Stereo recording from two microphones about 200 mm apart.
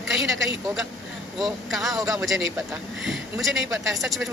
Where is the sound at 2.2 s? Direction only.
Centre (ahead or behind).